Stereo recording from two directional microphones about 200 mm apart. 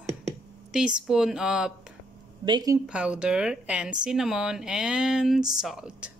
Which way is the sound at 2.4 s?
20° right (ahead or behind).